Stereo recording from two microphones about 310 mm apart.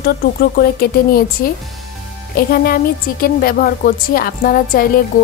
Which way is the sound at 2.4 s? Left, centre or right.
Left.